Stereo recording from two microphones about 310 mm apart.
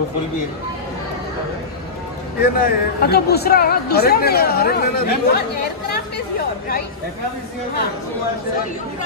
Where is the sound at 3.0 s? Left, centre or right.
Left.